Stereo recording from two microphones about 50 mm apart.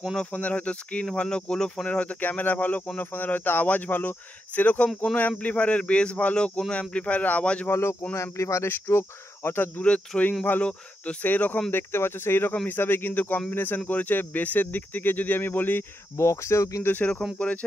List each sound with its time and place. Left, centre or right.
0.3 s speech: left; by 1.9 s centre
1.9 s speech: left
7.7 s speech: left
8.2 s speech: left
8.6 s speech: left
9.8 s speech: left
11.2 s speech: left
11.7 s speech: left
16.2 s speech: left
16.8 s speech: left